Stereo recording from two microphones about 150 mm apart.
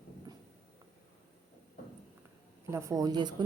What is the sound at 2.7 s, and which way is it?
Speech, 20° right (ahead or behind).